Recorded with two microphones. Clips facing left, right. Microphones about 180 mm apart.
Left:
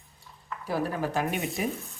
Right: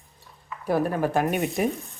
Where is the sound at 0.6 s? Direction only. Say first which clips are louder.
Right 6 dB; 55° right (ahead or behind).